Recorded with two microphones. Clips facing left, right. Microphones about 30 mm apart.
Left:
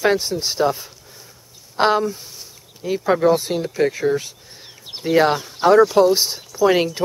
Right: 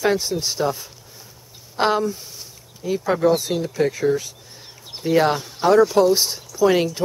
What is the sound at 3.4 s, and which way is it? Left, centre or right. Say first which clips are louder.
Speech: left 1 dB; left.